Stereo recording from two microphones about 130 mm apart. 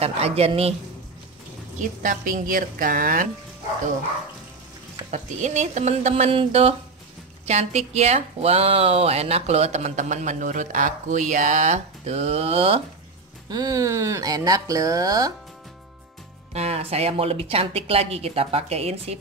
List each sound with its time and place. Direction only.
0.0 s a woman's voice: 50° right (ahead or behind)
1.8 s a woman's voice: 85° right
5.1 s a woman's voice: 65° right (ahead or behind); by 12.8 s 50° right (ahead or behind)
13.5 s speech: 30° right (ahead or behind)
16.5 s a woman's voice: 55° right (ahead or behind)